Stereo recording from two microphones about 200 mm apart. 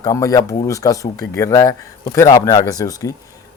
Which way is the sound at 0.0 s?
15° left (ahead or behind).